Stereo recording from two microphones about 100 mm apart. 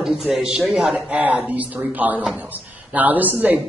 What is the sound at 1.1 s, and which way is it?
Speech, 15° right (ahead or behind).